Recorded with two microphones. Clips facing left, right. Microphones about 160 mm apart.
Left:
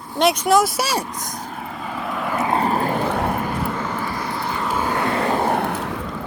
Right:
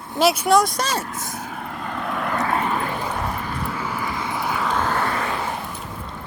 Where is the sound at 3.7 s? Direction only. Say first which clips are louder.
Left 2 dB; 10° right (ahead or behind).